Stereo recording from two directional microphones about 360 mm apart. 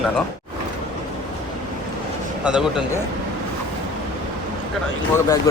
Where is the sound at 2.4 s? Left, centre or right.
Centre.